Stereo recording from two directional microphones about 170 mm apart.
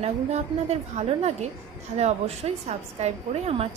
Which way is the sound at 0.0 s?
40° right (ahead or behind).